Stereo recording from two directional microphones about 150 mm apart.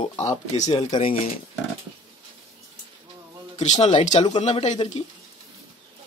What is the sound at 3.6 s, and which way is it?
Speech, 50° left (ahead or behind).